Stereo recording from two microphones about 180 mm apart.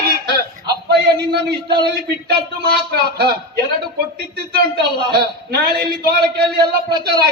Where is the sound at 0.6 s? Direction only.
65° right (ahead or behind).